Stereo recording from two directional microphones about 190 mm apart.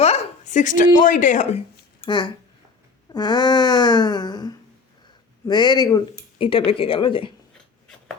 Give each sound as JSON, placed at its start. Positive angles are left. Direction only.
{"t": 0.0, "sound": "a sound", "side_deg": 35}
{"t": 0.9, "sound": "speech", "side_deg": 40}
{"t": 2.0, "sound": "speech", "side_deg": 25}